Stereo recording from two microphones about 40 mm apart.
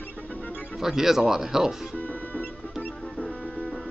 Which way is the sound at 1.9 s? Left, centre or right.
Left.